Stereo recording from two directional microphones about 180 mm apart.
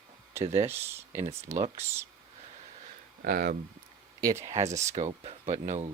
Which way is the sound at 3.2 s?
55° right (ahead or behind).